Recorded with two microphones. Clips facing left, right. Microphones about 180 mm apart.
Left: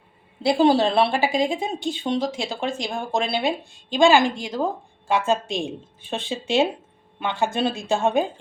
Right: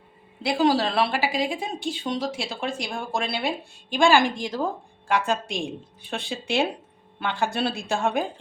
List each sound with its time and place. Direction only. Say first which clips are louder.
0.4 s speech: left 4 dB; 30° left (ahead or behind)